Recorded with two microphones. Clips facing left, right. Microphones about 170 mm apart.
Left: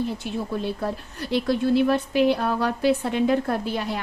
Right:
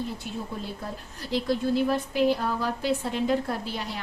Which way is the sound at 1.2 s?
65° left (ahead or behind).